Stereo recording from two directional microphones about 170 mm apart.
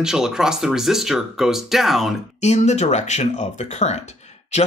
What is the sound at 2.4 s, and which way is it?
Speech, 40° left (ahead or behind).